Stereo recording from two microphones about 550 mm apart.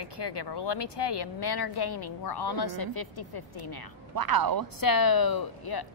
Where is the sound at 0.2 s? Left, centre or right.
Left.